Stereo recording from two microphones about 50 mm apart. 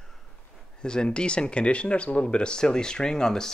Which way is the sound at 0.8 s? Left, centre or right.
Centre.